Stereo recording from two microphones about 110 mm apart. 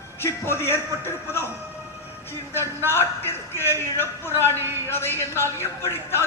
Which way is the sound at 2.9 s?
20° left (ahead or behind).